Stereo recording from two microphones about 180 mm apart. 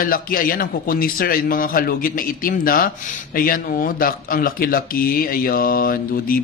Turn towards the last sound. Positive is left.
turn(degrees=55)  # may be behind; listen again after turning